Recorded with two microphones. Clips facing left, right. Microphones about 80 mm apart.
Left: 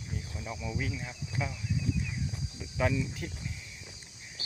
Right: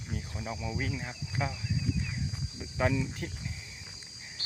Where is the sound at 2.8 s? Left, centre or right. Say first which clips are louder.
Right 1 dB; right.